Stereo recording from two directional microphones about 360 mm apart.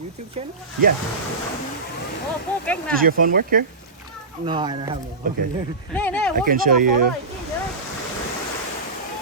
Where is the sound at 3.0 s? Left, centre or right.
Right.